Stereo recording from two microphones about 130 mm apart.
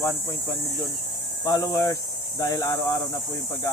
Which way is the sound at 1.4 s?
25° left (ahead or behind).